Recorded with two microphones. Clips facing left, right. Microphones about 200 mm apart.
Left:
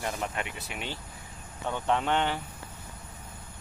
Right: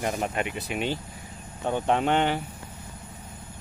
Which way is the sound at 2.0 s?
15° right (ahead or behind).